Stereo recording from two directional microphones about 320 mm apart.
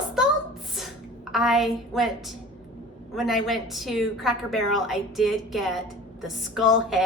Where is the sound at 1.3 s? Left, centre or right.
Centre.